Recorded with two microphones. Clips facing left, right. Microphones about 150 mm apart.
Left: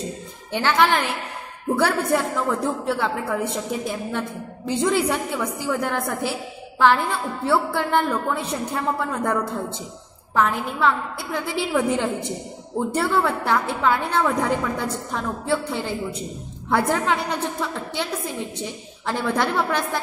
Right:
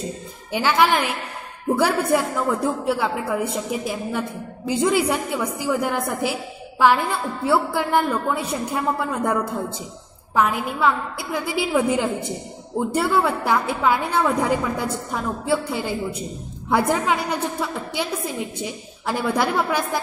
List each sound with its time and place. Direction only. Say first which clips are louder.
0.5 s a woman's voice: right 1 dB; 10° right (ahead or behind)
7.4 s a woman's voice: right 1 dB; 10° right (ahead or behind)